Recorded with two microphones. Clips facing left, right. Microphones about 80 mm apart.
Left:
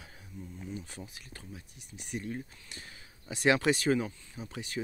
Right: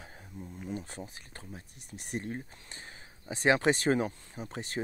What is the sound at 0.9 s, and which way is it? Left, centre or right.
Speech, right.